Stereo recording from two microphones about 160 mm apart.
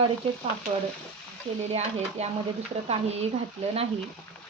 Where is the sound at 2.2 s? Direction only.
40° right (ahead or behind).